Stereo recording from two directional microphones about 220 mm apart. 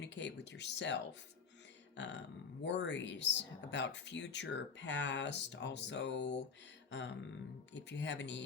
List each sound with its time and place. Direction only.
0.0 s speech: 55° left (ahead or behind)
2.0 s speech: 55° left (ahead or behind)